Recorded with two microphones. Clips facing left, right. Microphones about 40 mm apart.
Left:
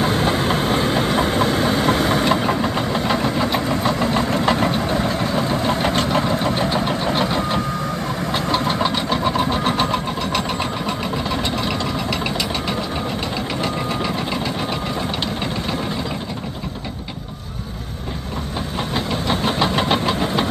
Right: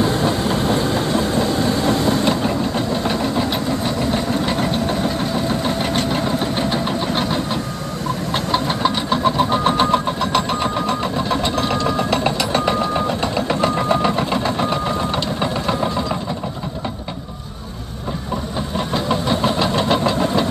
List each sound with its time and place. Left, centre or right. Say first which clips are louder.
0.2 s train: even; left
0.8 s vehicle: left 1 dB; left
2.9 s engine: even; left
12.1 s a sound: right 4 dB; centre
13.5 s sewing machine: right 8 dB; right
19.2 s engine: right 1 dB; left